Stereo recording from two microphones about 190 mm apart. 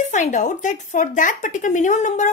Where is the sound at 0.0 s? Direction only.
40° left (ahead or behind).